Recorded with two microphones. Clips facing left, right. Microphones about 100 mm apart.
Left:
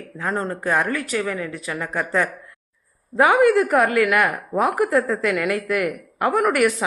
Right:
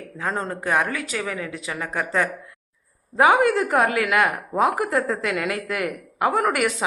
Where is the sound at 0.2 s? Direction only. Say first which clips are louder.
Left 2 dB; 15° right (ahead or behind).